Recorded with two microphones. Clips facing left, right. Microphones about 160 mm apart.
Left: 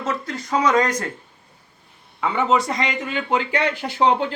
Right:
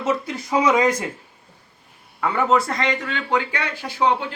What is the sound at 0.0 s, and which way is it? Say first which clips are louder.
Speech: right 3 dB; 10° right (ahead or behind).